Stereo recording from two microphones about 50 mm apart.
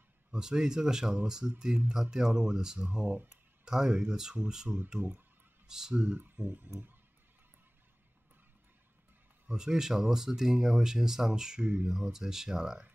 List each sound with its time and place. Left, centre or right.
0.3 s speech: centre
5.0 s speech: right
5.7 s speech: centre
6.1 s speech: right
9.5 s speech: centre
11.6 s speech: right
12.1 s speech: centre